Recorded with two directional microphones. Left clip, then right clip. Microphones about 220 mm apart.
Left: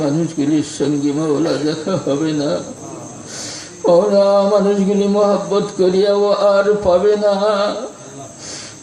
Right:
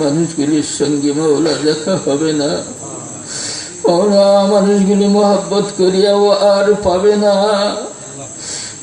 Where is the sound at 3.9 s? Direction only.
25° left (ahead or behind).